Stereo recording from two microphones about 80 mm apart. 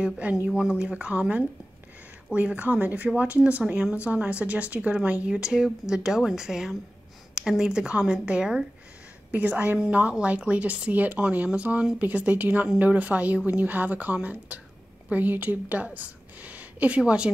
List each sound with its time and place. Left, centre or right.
0.0 s a woman's voice: centre